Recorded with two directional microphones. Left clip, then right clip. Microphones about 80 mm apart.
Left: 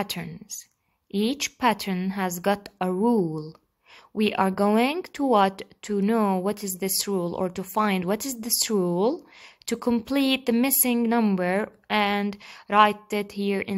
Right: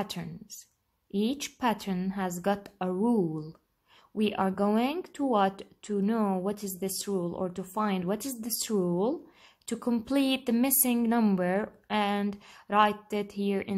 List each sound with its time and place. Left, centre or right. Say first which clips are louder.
0.0 s speech: left 5 dB; left
4.2 s speech: left 6 dB; left
7.1 s speech: left 5 dB; left